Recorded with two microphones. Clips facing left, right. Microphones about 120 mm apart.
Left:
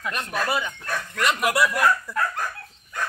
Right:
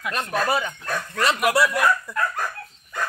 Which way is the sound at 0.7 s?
30° right (ahead or behind).